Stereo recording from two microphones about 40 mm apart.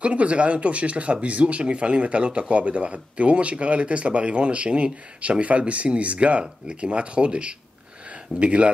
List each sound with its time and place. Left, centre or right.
0.0 s speech: right